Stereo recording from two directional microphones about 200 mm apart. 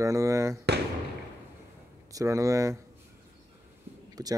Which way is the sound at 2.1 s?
15° right (ahead or behind).